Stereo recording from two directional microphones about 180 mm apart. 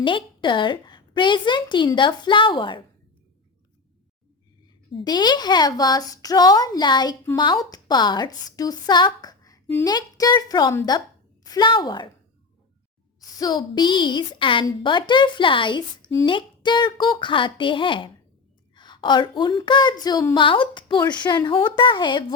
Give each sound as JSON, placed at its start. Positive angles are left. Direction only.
{"t": 0.0, "sound": "a woman's voice", "side_deg": 25}
{"t": 4.9, "sound": "a woman's voice", "side_deg": 25}
{"t": 13.4, "sound": "a woman's voice", "side_deg": 25}